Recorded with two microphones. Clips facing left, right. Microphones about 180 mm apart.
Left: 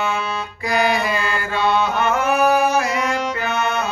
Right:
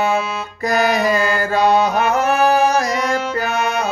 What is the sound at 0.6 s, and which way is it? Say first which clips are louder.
Mantra: right 3 dB; 45° right (ahead or behind).